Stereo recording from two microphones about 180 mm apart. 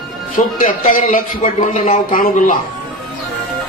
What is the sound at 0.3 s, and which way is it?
A man's voice, 50° left (ahead or behind).